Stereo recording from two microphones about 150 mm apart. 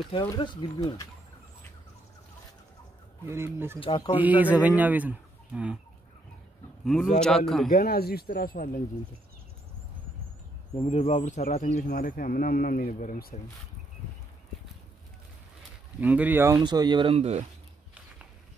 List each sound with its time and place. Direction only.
0.4 s speech: 30° left (ahead or behind)
3.3 s a man's voice: 15° right (ahead or behind)
3.8 s speech: 35° left (ahead or behind)
4.2 s a man's voice: 10° right (ahead or behind)
6.8 s a man's voice: centre (ahead or behind)
7.7 s speech: 90° left
10.8 s speech: 45° left (ahead or behind); by 13.4 s 70° left (ahead or behind)
16.0 s a man's voice: 10° right (ahead or behind)
16.6 s speech: 30° right (ahead or behind); by 17.5 s 45° right (ahead or behind)